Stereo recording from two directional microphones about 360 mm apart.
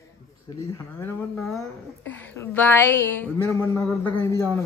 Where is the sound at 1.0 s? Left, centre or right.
Centre.